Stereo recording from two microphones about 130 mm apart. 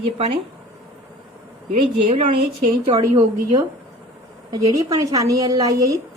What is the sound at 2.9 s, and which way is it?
A woman's voice, 30° right (ahead or behind).